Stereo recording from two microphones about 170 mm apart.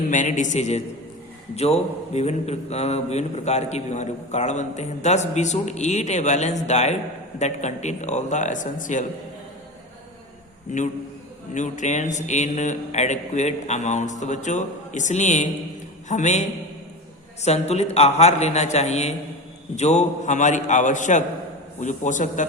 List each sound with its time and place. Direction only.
0.1 s a man's voice: 45° left (ahead or behind)
11.5 s a man's voice: 45° left (ahead or behind)